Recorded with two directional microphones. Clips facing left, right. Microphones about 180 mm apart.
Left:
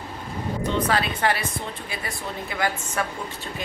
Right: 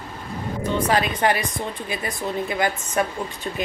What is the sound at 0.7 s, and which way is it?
Speech, 15° right (ahead or behind).